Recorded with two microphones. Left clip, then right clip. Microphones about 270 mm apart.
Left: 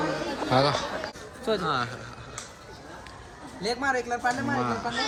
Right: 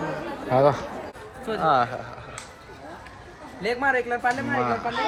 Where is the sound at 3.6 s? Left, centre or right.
Centre.